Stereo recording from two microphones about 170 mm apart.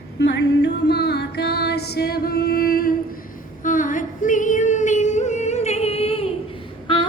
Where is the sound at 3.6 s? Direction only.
50° left (ahead or behind).